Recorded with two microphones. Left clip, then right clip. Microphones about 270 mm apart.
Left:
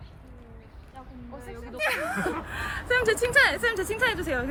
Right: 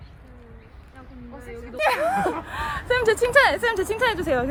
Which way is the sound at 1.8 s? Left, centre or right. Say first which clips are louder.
Right 6 dB; right.